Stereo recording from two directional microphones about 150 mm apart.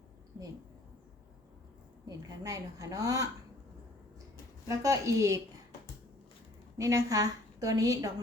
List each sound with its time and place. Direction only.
2.0 s a woman's voice: 25° right (ahead or behind)
4.8 s a woman's voice: 20° right (ahead or behind)
6.7 s a woman's voice: 20° right (ahead or behind)